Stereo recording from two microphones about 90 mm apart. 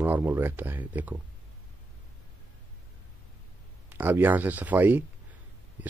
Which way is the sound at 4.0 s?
20° right (ahead or behind).